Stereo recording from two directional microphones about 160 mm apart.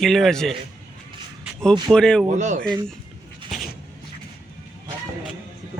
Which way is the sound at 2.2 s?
50° right (ahead or behind).